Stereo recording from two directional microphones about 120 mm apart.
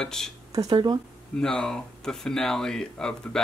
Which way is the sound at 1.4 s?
5° left (ahead or behind).